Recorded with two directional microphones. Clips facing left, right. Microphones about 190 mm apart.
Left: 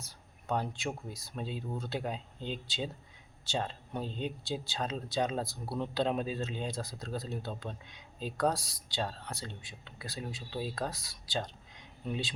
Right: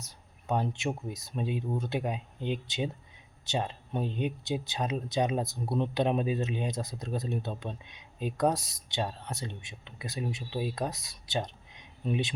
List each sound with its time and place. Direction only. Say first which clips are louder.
0.4 s speech: right 4 dB; 20° right (ahead or behind)